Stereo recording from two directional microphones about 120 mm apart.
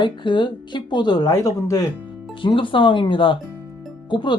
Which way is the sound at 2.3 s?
45° left (ahead or behind).